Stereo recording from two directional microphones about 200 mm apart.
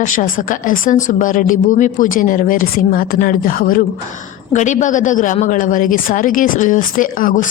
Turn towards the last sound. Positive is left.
turn(degrees=45)  # may be behind; listen again after turning